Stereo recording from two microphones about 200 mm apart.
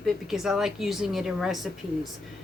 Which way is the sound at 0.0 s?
Centre (ahead or behind).